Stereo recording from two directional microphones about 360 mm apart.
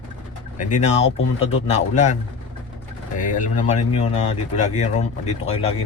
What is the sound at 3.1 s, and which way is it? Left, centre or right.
Speech, left.